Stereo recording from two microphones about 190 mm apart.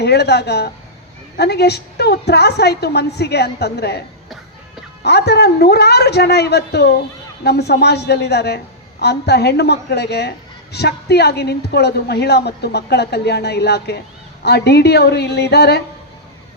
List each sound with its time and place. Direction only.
0.0 s a woman's voice: 60° left (ahead or behind)
5.0 s a woman's voice: 60° left (ahead or behind)